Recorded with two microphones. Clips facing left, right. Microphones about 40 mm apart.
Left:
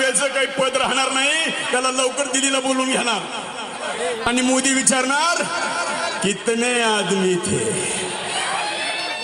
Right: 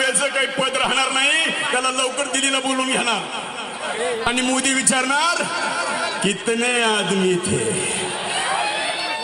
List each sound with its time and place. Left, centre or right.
0.0 s a man's voice: centre